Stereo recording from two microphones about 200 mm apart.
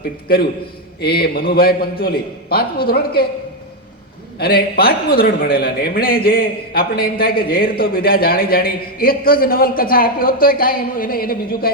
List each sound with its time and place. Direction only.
1.0 s a man's voice: 50° left (ahead or behind)
4.4 s a man's voice: 50° left (ahead or behind)